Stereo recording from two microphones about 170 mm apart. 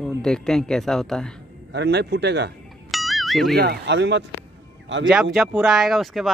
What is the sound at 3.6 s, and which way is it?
Speech, 75° right (ahead or behind).